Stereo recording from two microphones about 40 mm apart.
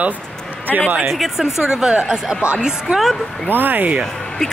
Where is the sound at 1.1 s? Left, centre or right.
Centre.